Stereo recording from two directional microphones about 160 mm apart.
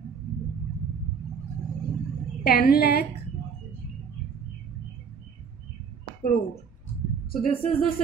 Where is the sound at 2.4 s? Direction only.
70° left (ahead or behind).